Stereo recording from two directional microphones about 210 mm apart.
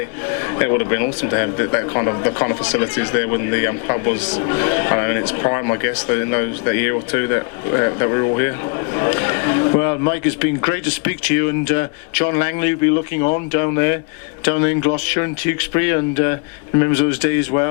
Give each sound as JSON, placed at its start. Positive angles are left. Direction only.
{"t": 0.3, "sound": "speech", "side_deg": 20}
{"t": 4.3, "sound": "speech", "side_deg": 25}
{"t": 4.5, "sound": "speech", "side_deg": 15}